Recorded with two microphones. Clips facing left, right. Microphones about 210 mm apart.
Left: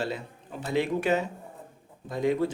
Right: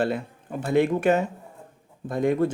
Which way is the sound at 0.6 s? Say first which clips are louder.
Right 6 dB; 50° right (ahead or behind).